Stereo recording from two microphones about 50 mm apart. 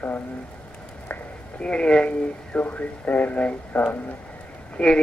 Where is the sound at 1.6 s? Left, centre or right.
Left.